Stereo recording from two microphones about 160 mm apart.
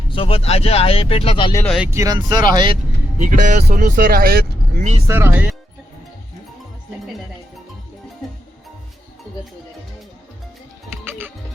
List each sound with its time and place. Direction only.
0.1 s speech: 35° left (ahead or behind)
1.8 s speech: 15° right (ahead or behind)
3.2 s speech: 50° right (ahead or behind); by 4.4 s 70° right (ahead or behind)
4.8 s speech: 45° right (ahead or behind)
5.0 s speech: 15° right (ahead or behind)